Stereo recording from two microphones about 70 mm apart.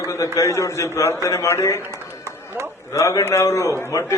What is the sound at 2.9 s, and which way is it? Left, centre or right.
Speech, left.